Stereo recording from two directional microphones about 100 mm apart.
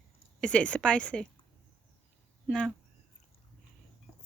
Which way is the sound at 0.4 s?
10° left (ahead or behind).